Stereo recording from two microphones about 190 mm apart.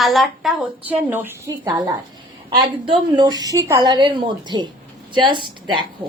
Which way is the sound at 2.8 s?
20° right (ahead or behind).